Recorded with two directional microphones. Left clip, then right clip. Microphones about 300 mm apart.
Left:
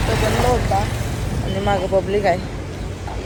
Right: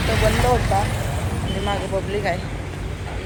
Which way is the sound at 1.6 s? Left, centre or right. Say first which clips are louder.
Left 7 dB; left.